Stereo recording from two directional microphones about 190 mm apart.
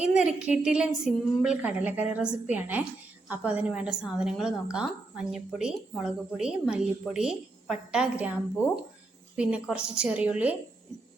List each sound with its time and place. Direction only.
0.0 s a woman's voice: 5° right (ahead or behind)
9.3 s a woman's voice: 5° right (ahead or behind)